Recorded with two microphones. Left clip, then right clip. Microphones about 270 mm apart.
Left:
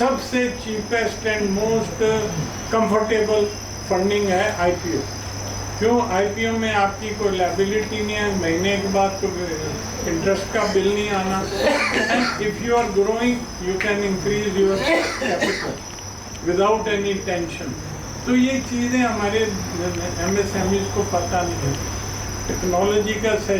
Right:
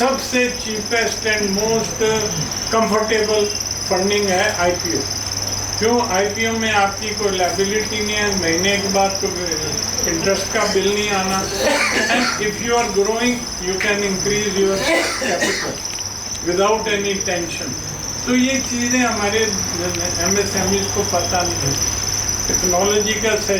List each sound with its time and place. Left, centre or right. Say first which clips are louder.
0.9 s speech: right 3 dB; centre
3.8 s speech: right 1 dB; centre
4.1 s speech: right 4 dB; centre
5.8 s speech: right 1 dB; centre
16.6 s speech: right 2 dB; centre
20.9 s speech: right 3 dB; centre
22.8 s speech: right 2 dB; centre